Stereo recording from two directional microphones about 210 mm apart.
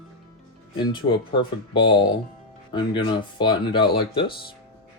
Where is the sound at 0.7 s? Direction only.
20° left (ahead or behind).